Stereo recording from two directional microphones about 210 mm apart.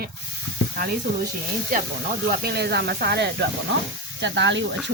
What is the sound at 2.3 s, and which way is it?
Speech, 50° right (ahead or behind).